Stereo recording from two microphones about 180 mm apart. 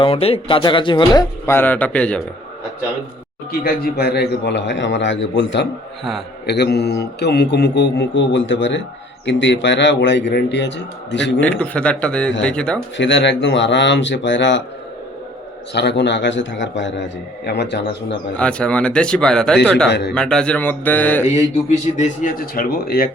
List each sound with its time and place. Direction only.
0.0 s speech: 35° left (ahead or behind)
1.5 s speech: 10° left (ahead or behind)
3.6 s a man's voice: 60° left (ahead or behind); by 5.6 s 85° left
6.4 s a man's voice: 65° left (ahead or behind)
11.3 s a man's voice: 5° left (ahead or behind)
13.0 s a man's voice: 90° left
15.7 s a man's voice: 70° left (ahead or behind)
18.3 s a man's voice: 5° left (ahead or behind)
19.9 s a man's voice: 70° left (ahead or behind)
20.1 s speech: 5° left (ahead or behind)
21.9 s speech: 45° left (ahead or behind)